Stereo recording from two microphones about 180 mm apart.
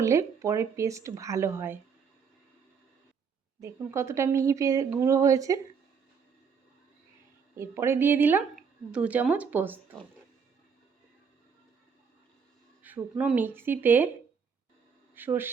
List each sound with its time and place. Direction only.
0.0 s speech: 15° right (ahead or behind)
3.6 s speech: 15° right (ahead or behind)
7.5 s speech: 15° right (ahead or behind)
12.8 s speech: 10° right (ahead or behind)
15.1 s speech: 10° right (ahead or behind)